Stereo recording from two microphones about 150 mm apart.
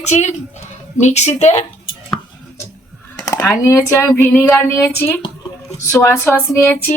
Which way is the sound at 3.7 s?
15° left (ahead or behind).